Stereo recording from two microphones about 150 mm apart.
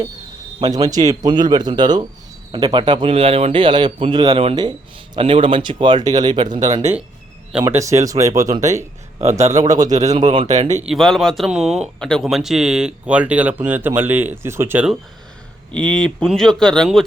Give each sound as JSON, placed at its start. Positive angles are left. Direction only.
{"t": 0.6, "sound": "a man's voice", "side_deg": -25}
{"t": 9.9, "sound": "speech", "side_deg": -50}
{"t": 10.8, "sound": "speech", "side_deg": 0}
{"t": 15.7, "sound": "speech", "side_deg": 5}